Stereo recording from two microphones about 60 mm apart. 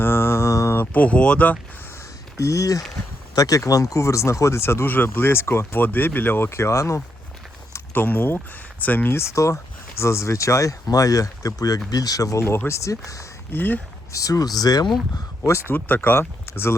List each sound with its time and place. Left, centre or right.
0.0 s mantra: left
0.9 s speech: left
2.4 s speech: left
3.3 s speech: left
3.7 s speech: left
5.8 s speech: left
7.9 s speech: left
9.3 s speech: left
11.9 s speech: left
12.4 s speech: left
13.5 s speech: left
14.1 s speech: left
15.7 s speech: left